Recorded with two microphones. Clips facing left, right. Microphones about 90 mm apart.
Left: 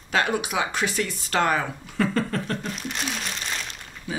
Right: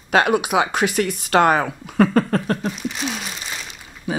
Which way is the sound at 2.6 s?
Centre (ahead or behind).